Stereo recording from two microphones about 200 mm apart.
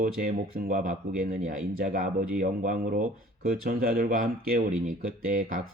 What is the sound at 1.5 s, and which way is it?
Speech, 40° right (ahead or behind).